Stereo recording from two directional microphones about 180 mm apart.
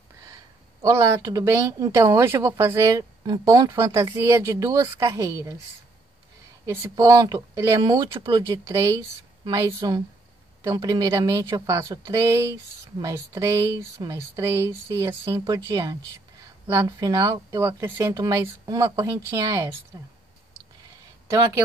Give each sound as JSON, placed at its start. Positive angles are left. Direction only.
{"t": 0.8, "sound": "speech", "side_deg": -15}
{"t": 6.6, "sound": "speech", "side_deg": -15}
{"t": 21.3, "sound": "speech", "side_deg": -15}